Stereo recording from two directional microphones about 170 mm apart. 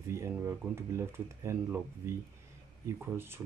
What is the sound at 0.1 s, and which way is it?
Speech, 15° right (ahead or behind).